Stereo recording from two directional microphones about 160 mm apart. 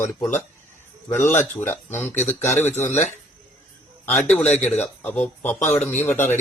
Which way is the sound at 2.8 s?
45° left (ahead or behind).